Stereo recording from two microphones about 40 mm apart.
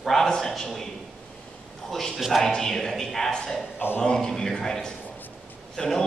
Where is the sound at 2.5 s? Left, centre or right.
Centre.